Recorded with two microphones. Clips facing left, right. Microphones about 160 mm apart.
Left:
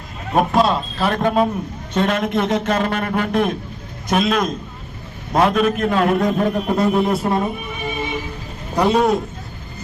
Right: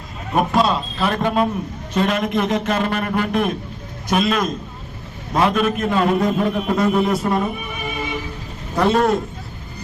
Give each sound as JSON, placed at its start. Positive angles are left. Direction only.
{"t": 0.3, "sound": "a man's voice", "side_deg": 0}
{"t": 7.3, "sound": "speech", "side_deg": 25}
{"t": 8.8, "sound": "a man's voice", "side_deg": 0}